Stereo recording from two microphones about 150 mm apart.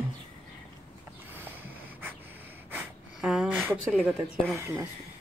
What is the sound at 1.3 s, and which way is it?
Snort, 15° right (ahead or behind).